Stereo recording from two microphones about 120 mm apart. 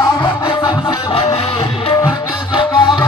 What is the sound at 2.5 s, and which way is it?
Music, 45° left (ahead or behind).